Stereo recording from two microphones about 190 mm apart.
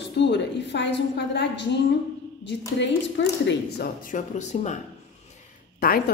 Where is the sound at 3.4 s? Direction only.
50° left (ahead or behind).